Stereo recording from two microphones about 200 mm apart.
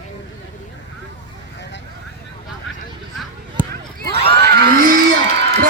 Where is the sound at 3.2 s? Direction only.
10° right (ahead or behind).